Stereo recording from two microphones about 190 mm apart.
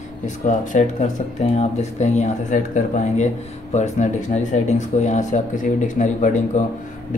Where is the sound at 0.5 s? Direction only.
40° left (ahead or behind).